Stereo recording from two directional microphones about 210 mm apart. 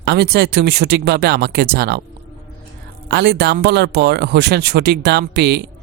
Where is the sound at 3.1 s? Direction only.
50° right (ahead or behind).